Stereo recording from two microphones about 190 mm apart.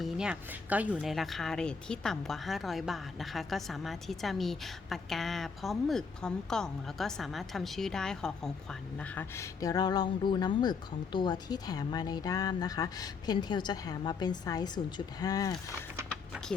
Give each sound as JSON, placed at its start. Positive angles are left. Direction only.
{"t": 0.0, "sound": "speech", "side_deg": -5}